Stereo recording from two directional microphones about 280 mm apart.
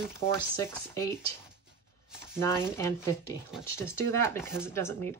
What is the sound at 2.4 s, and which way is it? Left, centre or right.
Speech, centre.